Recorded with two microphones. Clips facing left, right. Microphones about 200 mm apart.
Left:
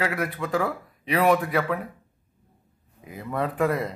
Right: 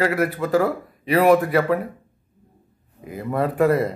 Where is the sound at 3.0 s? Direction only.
55° right (ahead or behind).